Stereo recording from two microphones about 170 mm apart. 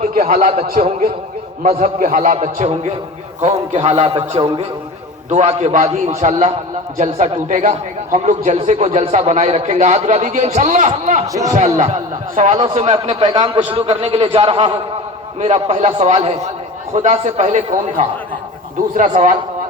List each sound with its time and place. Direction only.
0.0 s a man's voice: 55° right (ahead or behind)